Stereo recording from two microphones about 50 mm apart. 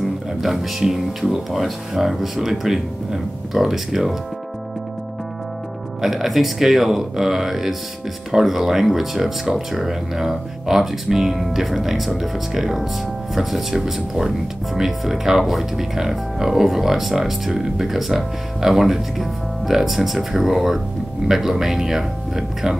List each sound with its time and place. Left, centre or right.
0.4 s speech: centre
5.9 s speech: centre